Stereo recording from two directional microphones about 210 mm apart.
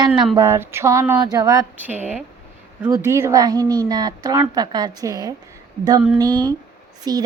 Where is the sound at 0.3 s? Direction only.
10° right (ahead or behind).